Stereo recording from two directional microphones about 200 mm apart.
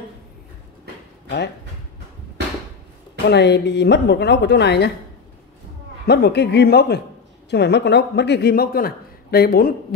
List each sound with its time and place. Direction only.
3.3 s speech: 60° left (ahead or behind)
6.0 s a man's voice: 55° left (ahead or behind)